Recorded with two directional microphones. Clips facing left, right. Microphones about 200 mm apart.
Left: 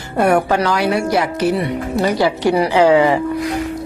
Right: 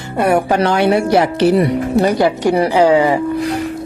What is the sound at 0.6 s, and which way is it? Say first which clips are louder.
Speech: right 4 dB; 25° right (ahead or behind).